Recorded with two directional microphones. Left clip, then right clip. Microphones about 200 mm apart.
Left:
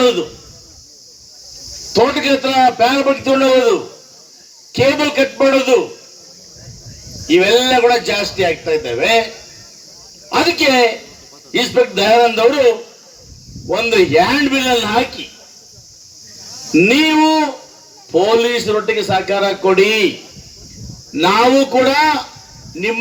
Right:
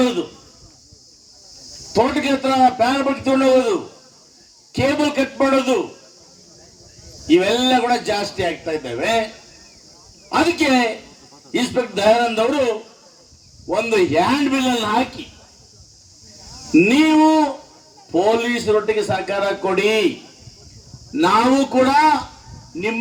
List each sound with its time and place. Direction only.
1.9 s a man's voice: 60° right (ahead or behind)
7.3 s a man's voice: 60° right (ahead or behind)
10.2 s a man's voice: 60° right (ahead or behind)
13.7 s a man's voice: 60° right (ahead or behind)
16.7 s a man's voice: 60° right (ahead or behind)
21.1 s a man's voice: 60° right (ahead or behind)